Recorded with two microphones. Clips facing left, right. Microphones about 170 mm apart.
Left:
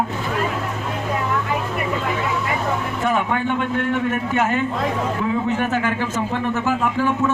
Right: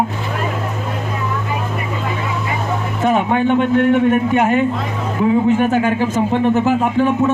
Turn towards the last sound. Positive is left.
turn(degrees=-20)  # may be behind; listen again after turning